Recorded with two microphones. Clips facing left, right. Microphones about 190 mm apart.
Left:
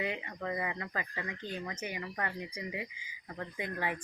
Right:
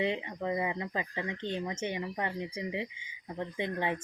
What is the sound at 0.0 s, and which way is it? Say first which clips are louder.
Speech: right 5 dB; 25° right (ahead or behind).